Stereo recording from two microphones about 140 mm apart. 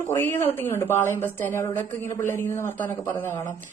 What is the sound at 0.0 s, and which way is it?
A woman's voice, 15° left (ahead or behind).